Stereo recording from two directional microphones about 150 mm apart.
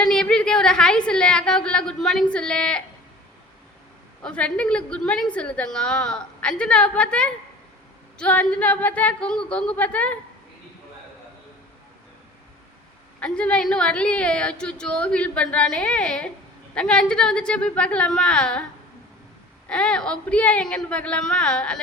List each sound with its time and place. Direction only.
0.0 s a woman's voice: 5° left (ahead or behind)
4.2 s a woman's voice: 5° left (ahead or behind)
13.1 s a woman's voice: 5° left (ahead or behind)
19.6 s a woman's voice: 5° left (ahead or behind)